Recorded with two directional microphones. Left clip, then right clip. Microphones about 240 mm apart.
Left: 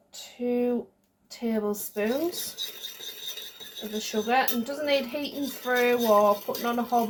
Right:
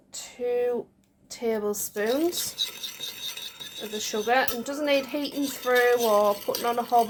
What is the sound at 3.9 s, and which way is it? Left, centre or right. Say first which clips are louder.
Speech: right 1 dB; right.